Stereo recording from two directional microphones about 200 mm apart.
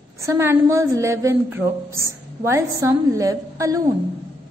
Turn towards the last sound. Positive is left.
turn(degrees=-15)  # may be behind; listen again after turning